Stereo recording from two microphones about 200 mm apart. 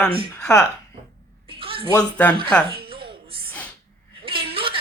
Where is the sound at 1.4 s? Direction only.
25° right (ahead or behind).